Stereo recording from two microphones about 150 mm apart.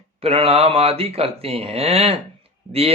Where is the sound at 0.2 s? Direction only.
40° right (ahead or behind).